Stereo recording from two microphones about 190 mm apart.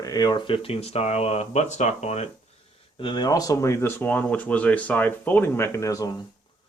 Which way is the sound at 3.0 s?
25° left (ahead or behind).